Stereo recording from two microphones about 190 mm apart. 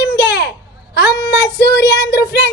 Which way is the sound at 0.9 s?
60° left (ahead or behind).